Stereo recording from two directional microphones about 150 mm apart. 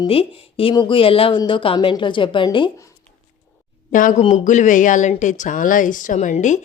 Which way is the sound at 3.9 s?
60° left (ahead or behind).